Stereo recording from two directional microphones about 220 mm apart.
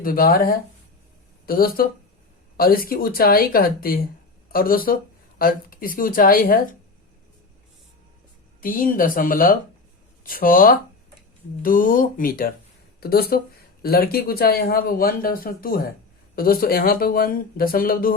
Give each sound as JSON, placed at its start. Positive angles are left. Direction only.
{"t": 0.0, "sound": "speech", "side_deg": 40}
{"t": 8.6, "sound": "speech", "side_deg": 40}